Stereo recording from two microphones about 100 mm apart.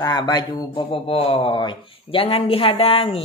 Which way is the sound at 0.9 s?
65° left (ahead or behind).